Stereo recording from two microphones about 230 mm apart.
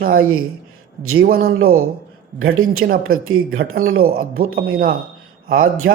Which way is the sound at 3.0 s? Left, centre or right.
Right.